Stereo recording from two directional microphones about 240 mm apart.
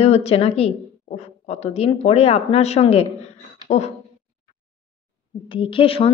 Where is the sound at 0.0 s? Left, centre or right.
Left.